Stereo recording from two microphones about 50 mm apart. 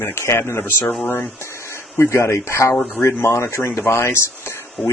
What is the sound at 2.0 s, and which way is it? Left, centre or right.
Speech, left.